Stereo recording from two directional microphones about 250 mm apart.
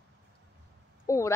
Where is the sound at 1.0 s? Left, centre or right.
Centre.